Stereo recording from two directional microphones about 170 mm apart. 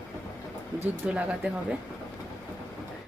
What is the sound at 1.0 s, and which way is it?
Speech, 5° right (ahead or behind).